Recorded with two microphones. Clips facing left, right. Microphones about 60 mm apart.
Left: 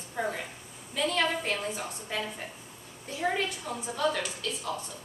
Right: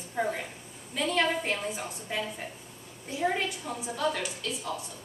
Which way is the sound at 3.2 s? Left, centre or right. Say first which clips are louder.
Right 1 dB; centre.